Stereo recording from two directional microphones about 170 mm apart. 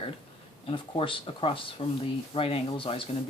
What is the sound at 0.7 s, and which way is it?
Rub, 30° left (ahead or behind).